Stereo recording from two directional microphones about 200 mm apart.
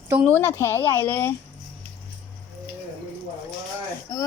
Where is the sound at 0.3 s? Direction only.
10° left (ahead or behind).